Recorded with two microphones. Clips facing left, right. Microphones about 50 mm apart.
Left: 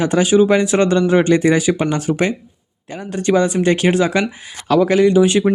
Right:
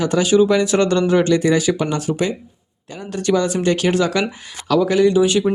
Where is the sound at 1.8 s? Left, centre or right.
Left.